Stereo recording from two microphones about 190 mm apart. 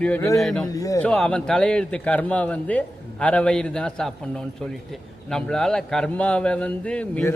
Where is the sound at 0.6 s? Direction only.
20° left (ahead or behind).